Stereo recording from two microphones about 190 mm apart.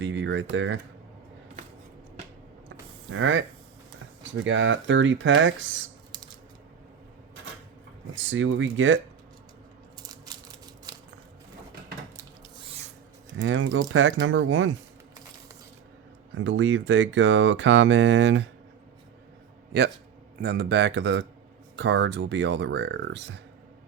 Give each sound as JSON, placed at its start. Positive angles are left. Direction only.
{"t": 0.0, "sound": "a sound", "side_deg": -70}
{"t": 0.5, "sound": "speech", "side_deg": -80}
{"t": 3.1, "sound": "speech", "side_deg": -90}
{"t": 4.4, "sound": "speech", "side_deg": -75}
{"t": 8.1, "sound": "speech", "side_deg": -85}
{"t": 10.0, "sound": "a sound", "side_deg": -20}
{"t": 13.3, "sound": "speech", "side_deg": -90}
{"t": 16.3, "sound": "speech", "side_deg": -90}
{"t": 20.4, "sound": "speech", "side_deg": -65}